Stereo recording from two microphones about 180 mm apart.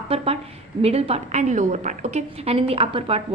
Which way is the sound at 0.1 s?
30° right (ahead or behind).